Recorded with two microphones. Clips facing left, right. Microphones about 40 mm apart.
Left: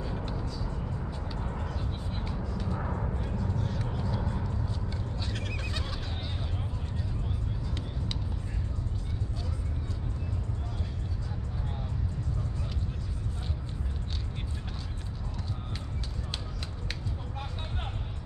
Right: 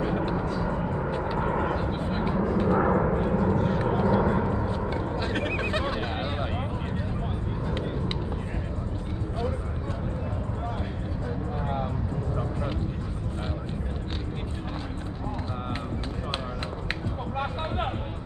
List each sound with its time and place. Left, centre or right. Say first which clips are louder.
0.2 s vehicle: right 10 dB; right
1.4 s a sound: right 12 dB; right
3.3 s vehicle: right 11 dB; right
11.6 s music: right 13 dB; right